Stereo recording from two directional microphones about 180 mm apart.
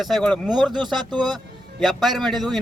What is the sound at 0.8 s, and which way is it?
Speech, 25° right (ahead or behind).